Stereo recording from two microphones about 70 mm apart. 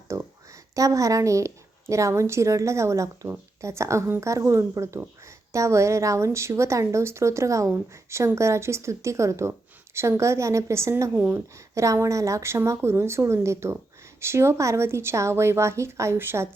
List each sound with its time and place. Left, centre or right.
0.8 s a woman's voice: right
11.1 s speech: right
11.5 s a woman's voice: right